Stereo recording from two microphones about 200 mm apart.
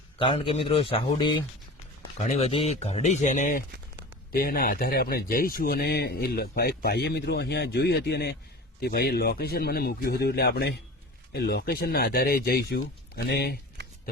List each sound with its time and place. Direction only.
0.2 s a man's voice: 25° left (ahead or behind)
2.1 s speech: 35° left (ahead or behind); by 13.6 s 55° left (ahead or behind)